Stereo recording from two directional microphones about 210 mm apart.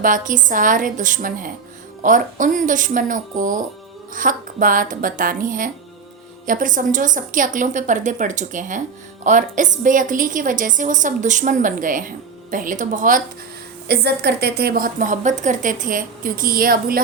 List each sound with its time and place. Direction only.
0.0 s a woman's voice: 40° right (ahead or behind)
13.8 s a woman's voice: 50° right (ahead or behind)